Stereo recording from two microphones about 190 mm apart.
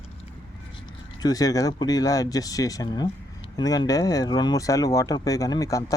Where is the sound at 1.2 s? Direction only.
20° left (ahead or behind).